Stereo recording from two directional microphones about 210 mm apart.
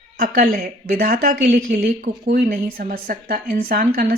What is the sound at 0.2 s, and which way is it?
Speech, 45° right (ahead or behind).